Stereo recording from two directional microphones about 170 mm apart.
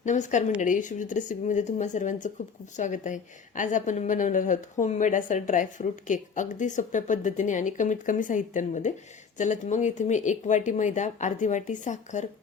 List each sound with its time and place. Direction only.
0.0 s a woman's voice: 45° left (ahead or behind)